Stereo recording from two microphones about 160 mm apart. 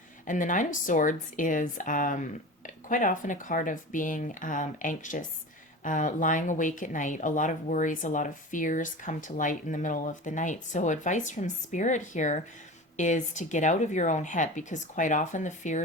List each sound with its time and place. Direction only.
0.3 s speech: 55° left (ahead or behind)